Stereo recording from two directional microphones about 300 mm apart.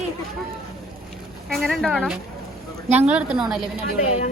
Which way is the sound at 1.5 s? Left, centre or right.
Centre.